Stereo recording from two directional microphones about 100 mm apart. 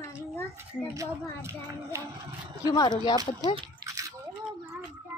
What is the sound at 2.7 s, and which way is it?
Speech, 45° left (ahead or behind).